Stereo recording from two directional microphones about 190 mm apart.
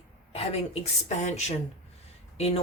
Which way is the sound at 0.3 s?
35° left (ahead or behind).